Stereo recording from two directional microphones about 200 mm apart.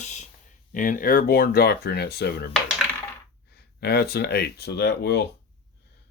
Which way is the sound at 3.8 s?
50° left (ahead or behind).